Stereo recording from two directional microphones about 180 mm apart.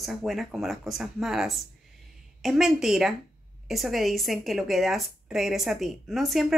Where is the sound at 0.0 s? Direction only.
Centre (ahead or behind).